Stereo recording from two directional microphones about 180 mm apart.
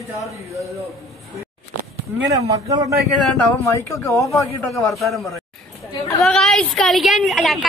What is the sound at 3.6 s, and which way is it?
A man's voice, 15° left (ahead or behind).